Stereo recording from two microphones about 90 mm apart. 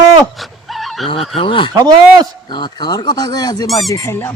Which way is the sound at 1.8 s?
50° right (ahead or behind).